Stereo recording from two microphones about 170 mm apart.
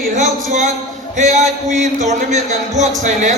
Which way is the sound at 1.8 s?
45° right (ahead or behind).